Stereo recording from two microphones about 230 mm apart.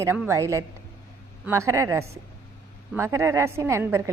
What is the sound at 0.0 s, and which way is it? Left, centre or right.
A woman's voice, centre.